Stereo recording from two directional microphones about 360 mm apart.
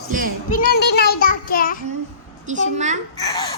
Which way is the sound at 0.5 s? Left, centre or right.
Left.